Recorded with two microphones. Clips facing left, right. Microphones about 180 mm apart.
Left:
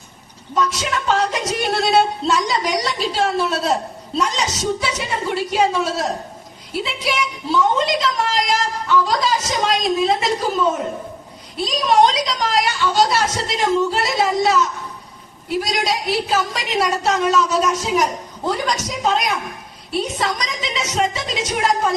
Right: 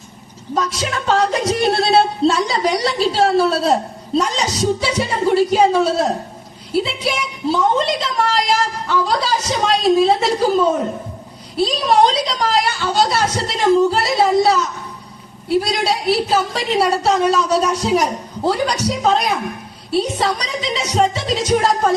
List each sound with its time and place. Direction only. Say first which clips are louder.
0.5 s a woman's voice: even; 30° right (ahead or behind)